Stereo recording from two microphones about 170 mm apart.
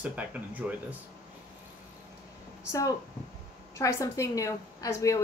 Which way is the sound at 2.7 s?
20° left (ahead or behind).